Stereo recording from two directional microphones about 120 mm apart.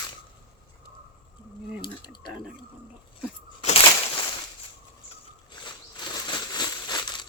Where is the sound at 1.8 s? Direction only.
35° left (ahead or behind).